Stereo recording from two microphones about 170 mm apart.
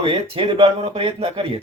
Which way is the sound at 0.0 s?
30° right (ahead or behind).